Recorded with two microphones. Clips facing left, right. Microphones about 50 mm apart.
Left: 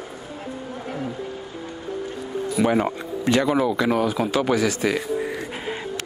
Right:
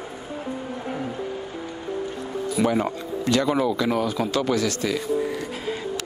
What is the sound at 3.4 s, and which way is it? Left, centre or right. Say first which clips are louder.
Speech: left 2 dB; centre.